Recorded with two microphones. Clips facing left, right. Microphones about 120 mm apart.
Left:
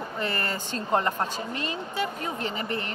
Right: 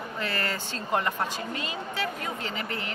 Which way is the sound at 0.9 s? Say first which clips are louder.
Left 2 dB; 30° left (ahead or behind).